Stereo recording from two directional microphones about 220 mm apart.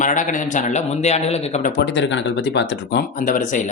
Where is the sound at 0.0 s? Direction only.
35° left (ahead or behind).